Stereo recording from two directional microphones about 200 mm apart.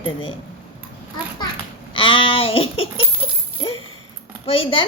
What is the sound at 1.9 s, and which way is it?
Speech, 25° left (ahead or behind).